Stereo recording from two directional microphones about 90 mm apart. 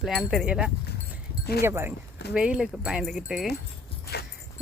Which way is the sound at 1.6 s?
25° right (ahead or behind).